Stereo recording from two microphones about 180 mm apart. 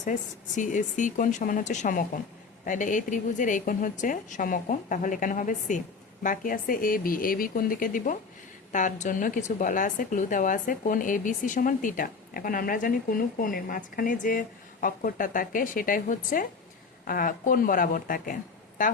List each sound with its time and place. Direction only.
0.0 s speech: 45° left (ahead or behind)